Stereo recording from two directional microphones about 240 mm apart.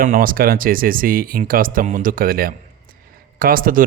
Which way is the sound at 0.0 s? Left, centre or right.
Right.